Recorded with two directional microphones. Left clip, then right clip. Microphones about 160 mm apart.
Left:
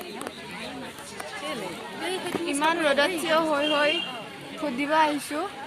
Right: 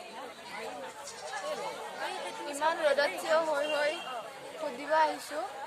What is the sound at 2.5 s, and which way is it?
A woman's voice, 10° left (ahead or behind).